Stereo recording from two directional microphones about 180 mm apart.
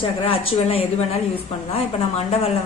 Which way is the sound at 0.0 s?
30° left (ahead or behind).